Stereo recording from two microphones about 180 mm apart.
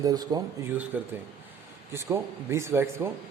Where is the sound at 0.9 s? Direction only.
10° right (ahead or behind).